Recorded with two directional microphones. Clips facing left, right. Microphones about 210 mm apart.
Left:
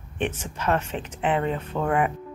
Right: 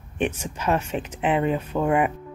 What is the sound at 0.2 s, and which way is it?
Speech, 10° right (ahead or behind).